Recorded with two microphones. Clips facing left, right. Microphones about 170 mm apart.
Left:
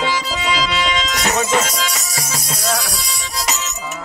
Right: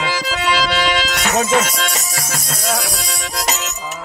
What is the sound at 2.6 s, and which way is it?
Music, 5° right (ahead or behind).